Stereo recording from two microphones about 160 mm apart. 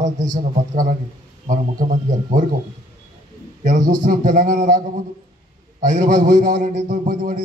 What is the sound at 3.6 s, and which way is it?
A man's voice, 50° right (ahead or behind).